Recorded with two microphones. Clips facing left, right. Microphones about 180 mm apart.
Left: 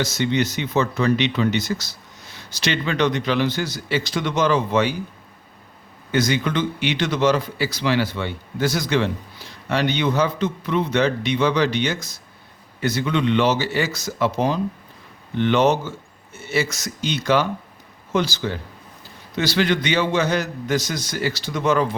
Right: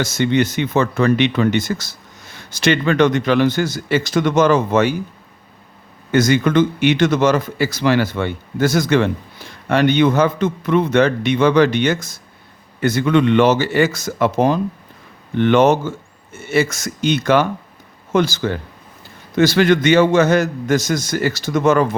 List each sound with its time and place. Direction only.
0.0 s a man's voice: 50° right (ahead or behind)
6.1 s a man's voice: 50° right (ahead or behind)